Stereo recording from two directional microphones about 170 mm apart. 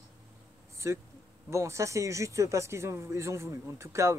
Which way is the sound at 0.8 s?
15° right (ahead or behind).